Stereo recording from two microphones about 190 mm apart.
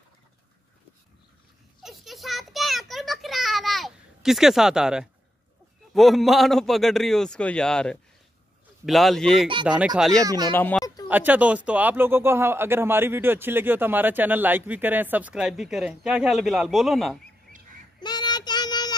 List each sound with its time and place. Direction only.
1.8 s a sound: centre (ahead or behind)
5.9 s a man's voice: centre (ahead or behind)
10.2 s speech: 20° right (ahead or behind)
10.5 s speech: 10° left (ahead or behind)
11.1 s speech: 10° right (ahead or behind)
18.0 s child singing: 20° left (ahead or behind)